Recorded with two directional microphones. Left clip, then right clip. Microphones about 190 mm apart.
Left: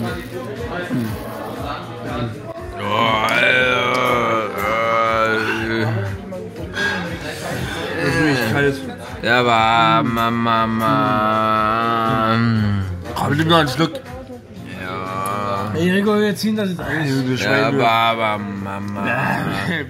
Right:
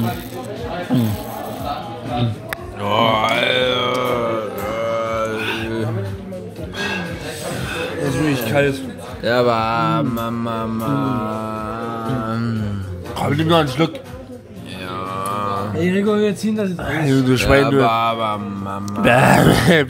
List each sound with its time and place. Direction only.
2.8 s mantra: 15° right (ahead or behind)
8.3 s a sound: 25° right (ahead or behind)
9.2 s mantra: 5° right (ahead or behind)
13.1 s speech: 10° right (ahead or behind)
15.1 s livestock: 5° right (ahead or behind)
15.8 s speech: 10° left (ahead or behind)
16.8 s speech: 30° right (ahead or behind)
17.6 s speech: centre (ahead or behind)
19.0 s speech: 55° right (ahead or behind)